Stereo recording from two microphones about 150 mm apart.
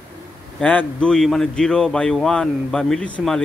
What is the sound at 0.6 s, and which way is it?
Speech, 10° left (ahead or behind).